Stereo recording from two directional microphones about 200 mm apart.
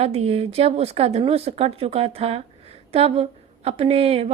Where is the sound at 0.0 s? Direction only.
30° right (ahead or behind).